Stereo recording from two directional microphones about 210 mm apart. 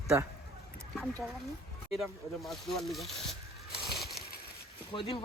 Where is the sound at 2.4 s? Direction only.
Centre (ahead or behind).